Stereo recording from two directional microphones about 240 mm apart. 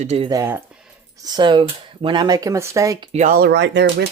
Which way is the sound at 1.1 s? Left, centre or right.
Centre.